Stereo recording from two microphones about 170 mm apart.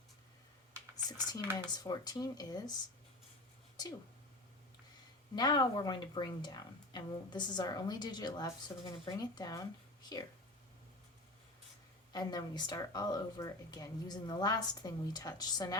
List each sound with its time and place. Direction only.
1.0 s speech: 25° left (ahead or behind)
5.3 s speech: 25° left (ahead or behind)
12.1 s speech: 25° left (ahead or behind)